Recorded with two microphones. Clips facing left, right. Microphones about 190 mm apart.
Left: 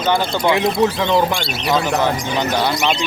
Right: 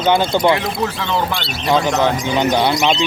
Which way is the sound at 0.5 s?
20° left (ahead or behind).